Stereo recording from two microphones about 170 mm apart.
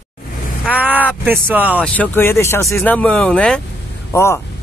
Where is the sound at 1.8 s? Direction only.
10° left (ahead or behind).